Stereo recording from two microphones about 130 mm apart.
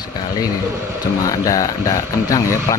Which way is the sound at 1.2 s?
25° left (ahead or behind).